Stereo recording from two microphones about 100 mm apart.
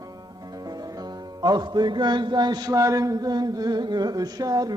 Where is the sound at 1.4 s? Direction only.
45° right (ahead or behind).